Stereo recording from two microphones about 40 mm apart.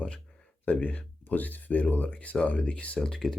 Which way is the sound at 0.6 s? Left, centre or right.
Left.